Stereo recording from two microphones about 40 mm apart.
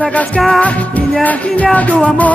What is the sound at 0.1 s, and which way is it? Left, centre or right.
Music, left.